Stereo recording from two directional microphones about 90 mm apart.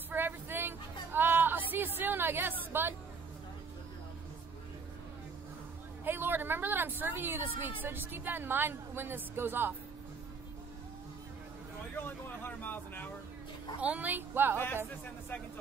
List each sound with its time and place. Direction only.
0.1 s music: 25° right (ahead or behind)
6.0 s speech: 25° right (ahead or behind)
12.4 s speech: 20° left (ahead or behind)
13.7 s speech: 15° right (ahead or behind)